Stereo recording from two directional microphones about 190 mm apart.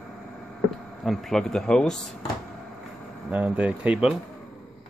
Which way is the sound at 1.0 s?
Centre (ahead or behind).